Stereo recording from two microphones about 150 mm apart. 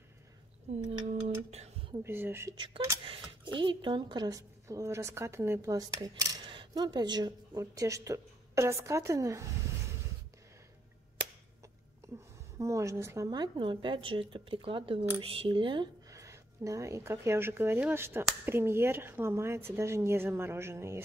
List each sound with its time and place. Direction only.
1.0 s a sound: 45° right (ahead or behind)
2.0 s speech: 15° right (ahead or behind)
2.5 s a woman's voice: 30° right (ahead or behind)
12.5 s a woman's voice: 20° right (ahead or behind)